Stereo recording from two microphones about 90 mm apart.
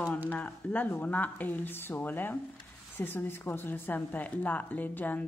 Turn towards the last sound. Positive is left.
turn(degrees=20)  # may be behind; listen again after turning